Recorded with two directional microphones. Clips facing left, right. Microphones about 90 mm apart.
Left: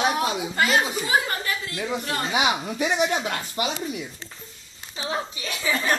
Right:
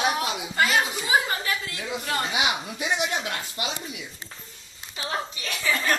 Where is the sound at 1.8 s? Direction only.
40° left (ahead or behind).